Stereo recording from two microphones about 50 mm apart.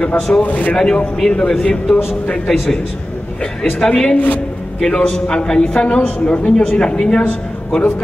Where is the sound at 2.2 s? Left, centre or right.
Left.